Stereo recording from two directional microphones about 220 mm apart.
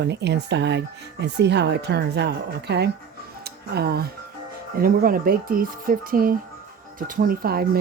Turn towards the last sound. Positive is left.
turn(degrees=-45)  # may be behind; listen again after turning